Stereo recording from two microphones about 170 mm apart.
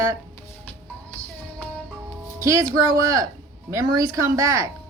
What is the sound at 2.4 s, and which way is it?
A woman's voice, 20° right (ahead or behind).